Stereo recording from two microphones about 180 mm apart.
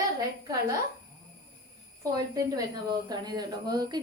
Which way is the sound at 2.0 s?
20° right (ahead or behind).